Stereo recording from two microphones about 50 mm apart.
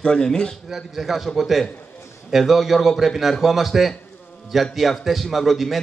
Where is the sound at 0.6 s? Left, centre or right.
Centre.